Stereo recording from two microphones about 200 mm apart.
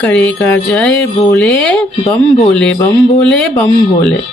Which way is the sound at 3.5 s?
15° left (ahead or behind).